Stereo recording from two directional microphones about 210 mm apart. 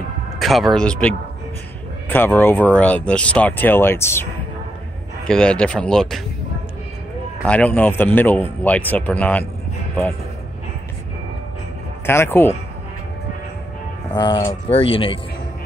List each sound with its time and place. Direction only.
0.4 s speech: centre (ahead or behind)
7.4 s speech: 5° left (ahead or behind)
12.1 s speech: 10° left (ahead or behind)
14.1 s speech: 20° left (ahead or behind)